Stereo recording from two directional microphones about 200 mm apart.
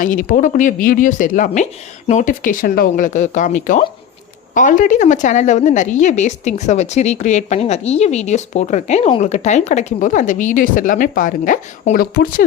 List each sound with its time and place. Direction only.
0.0 s a woman's voice: 40° left (ahead or behind)